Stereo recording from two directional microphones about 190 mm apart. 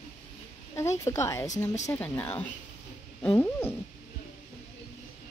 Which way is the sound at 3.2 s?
10° left (ahead or behind).